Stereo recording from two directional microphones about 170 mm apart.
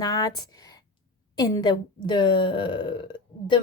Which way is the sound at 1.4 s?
25° left (ahead or behind).